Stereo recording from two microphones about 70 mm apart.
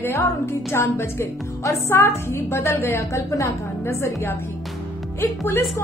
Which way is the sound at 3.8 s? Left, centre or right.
Left.